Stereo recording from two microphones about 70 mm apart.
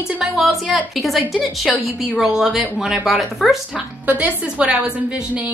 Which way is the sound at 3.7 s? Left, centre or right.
Right.